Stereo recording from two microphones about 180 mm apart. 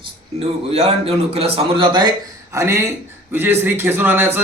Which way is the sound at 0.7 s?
35° right (ahead or behind).